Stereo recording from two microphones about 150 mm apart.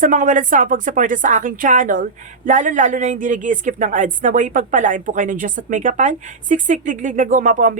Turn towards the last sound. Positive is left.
turn(degrees=-60)  # may be behind; listen again after turning